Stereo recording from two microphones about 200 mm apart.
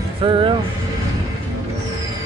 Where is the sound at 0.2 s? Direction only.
25° right (ahead or behind).